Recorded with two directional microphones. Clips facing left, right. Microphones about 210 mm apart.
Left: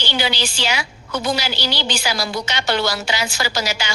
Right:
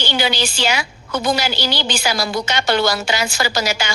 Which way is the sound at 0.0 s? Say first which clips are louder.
Right 2 dB; 50° right (ahead or behind).